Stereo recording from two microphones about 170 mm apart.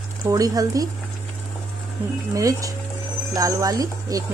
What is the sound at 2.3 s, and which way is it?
Speech, 20° right (ahead or behind).